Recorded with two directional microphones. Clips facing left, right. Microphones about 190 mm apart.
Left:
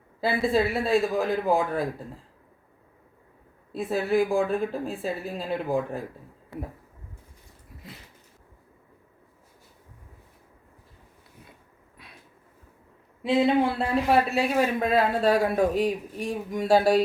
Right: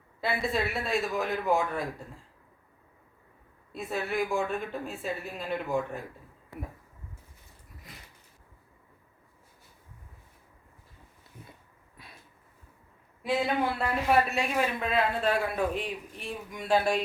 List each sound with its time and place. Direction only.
0.2 s speech: 30° left (ahead or behind)
3.7 s speech: 30° left (ahead or behind)
13.7 s speech: 30° left (ahead or behind)